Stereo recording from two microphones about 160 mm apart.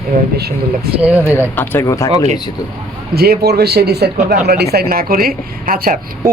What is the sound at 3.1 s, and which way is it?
Speech, 75° right (ahead or behind).